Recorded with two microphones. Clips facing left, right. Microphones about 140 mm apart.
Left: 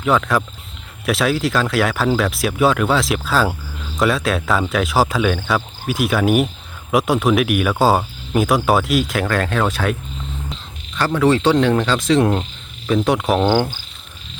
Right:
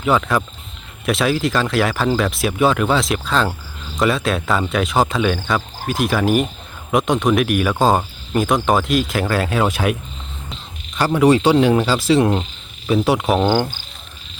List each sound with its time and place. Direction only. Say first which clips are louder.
0.0 s speech: even; centre (ahead or behind)